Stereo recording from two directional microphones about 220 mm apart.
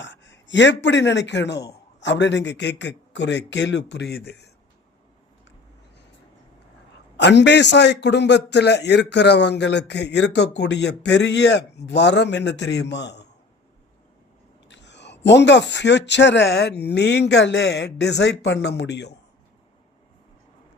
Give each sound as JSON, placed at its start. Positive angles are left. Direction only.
{"t": 0.0, "sound": "a man's voice", "side_deg": 55}
{"t": 7.2, "sound": "a man's voice", "side_deg": 50}
{"t": 14.7, "sound": "a man's voice", "side_deg": 55}